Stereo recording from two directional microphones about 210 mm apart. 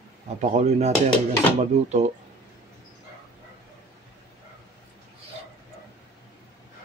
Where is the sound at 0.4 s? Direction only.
35° right (ahead or behind).